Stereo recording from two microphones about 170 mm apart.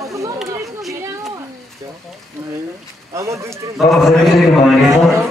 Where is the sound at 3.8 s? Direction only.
Centre (ahead or behind).